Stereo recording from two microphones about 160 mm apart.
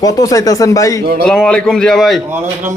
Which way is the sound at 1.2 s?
5° left (ahead or behind).